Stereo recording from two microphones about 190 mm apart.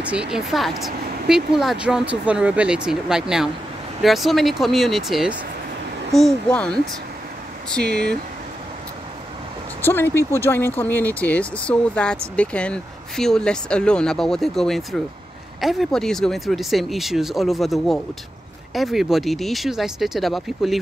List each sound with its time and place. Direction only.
0.0 s speech: 5° right (ahead or behind)
7.8 s speech: 60° right (ahead or behind)
9.8 s speech: 10° left (ahead or behind)